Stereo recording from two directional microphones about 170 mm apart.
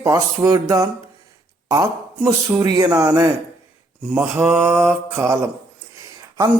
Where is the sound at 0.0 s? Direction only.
20° right (ahead or behind).